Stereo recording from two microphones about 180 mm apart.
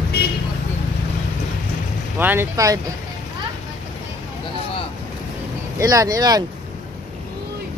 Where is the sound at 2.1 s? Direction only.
10° right (ahead or behind).